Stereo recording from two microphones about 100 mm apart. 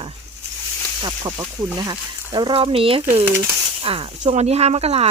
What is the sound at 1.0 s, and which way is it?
Speech, 50° right (ahead or behind).